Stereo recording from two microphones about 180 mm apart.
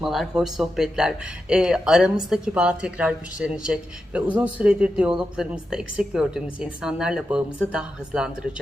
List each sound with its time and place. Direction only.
0.0 s a woman's voice: centre (ahead or behind)